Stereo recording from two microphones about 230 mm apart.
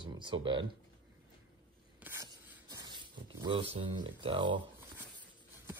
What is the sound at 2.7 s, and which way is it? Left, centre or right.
Speech, centre.